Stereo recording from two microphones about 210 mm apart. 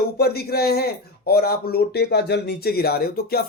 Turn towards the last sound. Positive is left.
turn(degrees=45)  # may be behind; listen again after turning